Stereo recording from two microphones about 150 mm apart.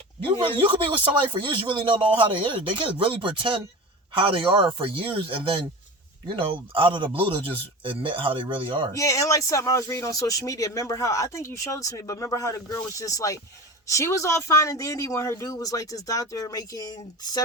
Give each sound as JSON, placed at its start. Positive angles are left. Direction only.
{"t": 0.6, "sound": "speech", "side_deg": -35}
{"t": 9.0, "sound": "speech", "side_deg": 20}